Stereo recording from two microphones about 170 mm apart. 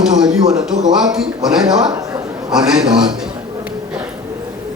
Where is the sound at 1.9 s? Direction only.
20° right (ahead or behind).